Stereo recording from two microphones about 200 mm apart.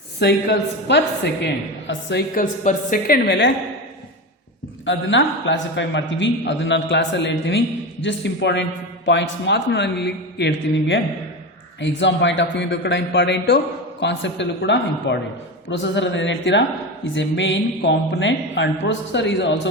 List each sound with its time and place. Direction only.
0.2 s a man's voice: 60° left (ahead or behind)
2.3 s speech: 40° left (ahead or behind)
3.2 s a man's voice: 60° left (ahead or behind)
4.9 s a man's voice: 65° left (ahead or behind)